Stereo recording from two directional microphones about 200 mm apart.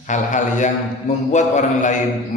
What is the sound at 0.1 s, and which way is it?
A man's voice, 35° left (ahead or behind).